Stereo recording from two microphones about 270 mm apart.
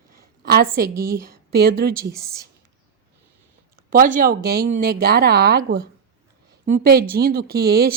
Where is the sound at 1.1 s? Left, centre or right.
Right.